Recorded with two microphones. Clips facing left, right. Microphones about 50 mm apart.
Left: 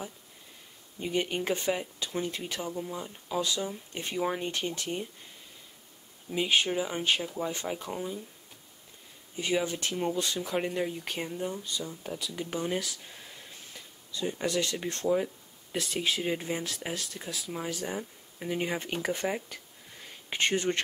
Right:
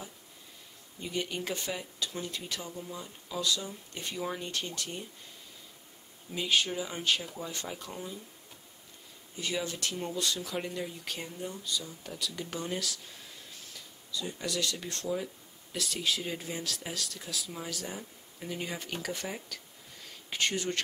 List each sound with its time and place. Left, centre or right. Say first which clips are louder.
0.9 s speech: left 5 dB; left
6.3 s speech: left 3 dB; left
9.4 s speech: left 5 dB; left
12.1 s speech: left 1 dB; centre